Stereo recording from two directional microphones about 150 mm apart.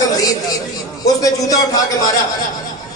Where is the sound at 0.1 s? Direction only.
25° left (ahead or behind).